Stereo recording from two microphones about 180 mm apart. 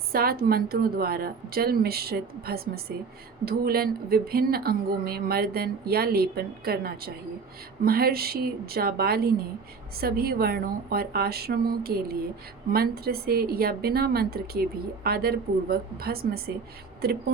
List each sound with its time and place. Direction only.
0.1 s a woman's voice: 55° right (ahead or behind)